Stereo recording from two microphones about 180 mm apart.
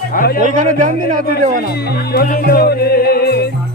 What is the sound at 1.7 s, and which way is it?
Speech, 60° left (ahead or behind).